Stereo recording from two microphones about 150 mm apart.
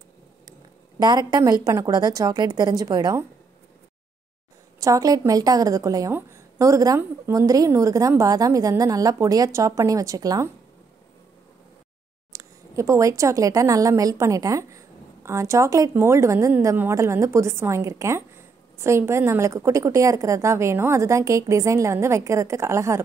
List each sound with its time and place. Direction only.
0.5 s a woman's voice: 30° right (ahead or behind)
4.7 s a woman's voice: 20° right (ahead or behind)
12.3 s a woman's voice: 20° right (ahead or behind)